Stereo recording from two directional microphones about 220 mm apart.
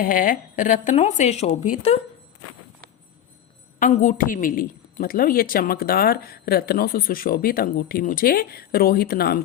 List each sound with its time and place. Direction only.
0.0 s a woman's voice: 40° left (ahead or behind)
3.8 s a woman's voice: 35° left (ahead or behind)